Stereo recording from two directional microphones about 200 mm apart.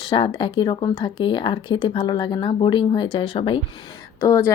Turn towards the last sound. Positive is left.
turn(degrees=15)  # may be behind; listen again after turning